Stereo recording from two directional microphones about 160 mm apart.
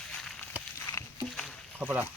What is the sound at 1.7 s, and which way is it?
Speech, 10° right (ahead or behind).